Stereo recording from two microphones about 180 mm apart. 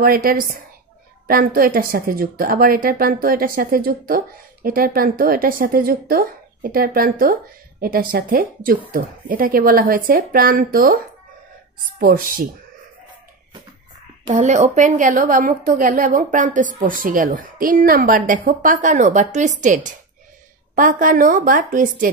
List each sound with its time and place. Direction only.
0.0 s a woman's voice: 55° right (ahead or behind)
12.0 s a woman's voice: 50° right (ahead or behind)
14.3 s a woman's voice: 45° right (ahead or behind)